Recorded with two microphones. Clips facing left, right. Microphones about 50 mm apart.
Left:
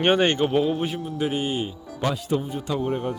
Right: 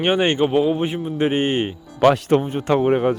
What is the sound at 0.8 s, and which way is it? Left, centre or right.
Speech, right.